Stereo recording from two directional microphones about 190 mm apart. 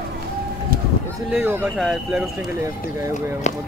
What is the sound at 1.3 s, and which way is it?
Speech, 10° right (ahead or behind).